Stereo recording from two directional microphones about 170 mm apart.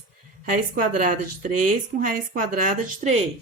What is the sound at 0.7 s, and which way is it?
Speech, 55° right (ahead or behind).